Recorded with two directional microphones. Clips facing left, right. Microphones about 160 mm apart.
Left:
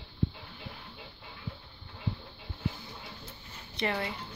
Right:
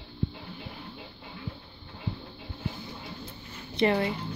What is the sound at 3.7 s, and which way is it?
Speech, 25° right (ahead or behind).